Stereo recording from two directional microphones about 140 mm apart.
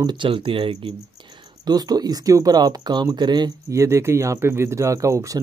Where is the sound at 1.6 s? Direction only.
30° right (ahead or behind).